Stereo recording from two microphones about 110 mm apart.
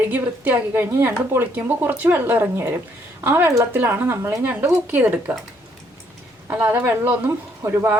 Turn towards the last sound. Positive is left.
turn(degrees=-25)  # may be behind; listen again after turning